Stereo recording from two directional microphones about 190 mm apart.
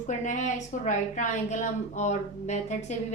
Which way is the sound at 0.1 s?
40° left (ahead or behind).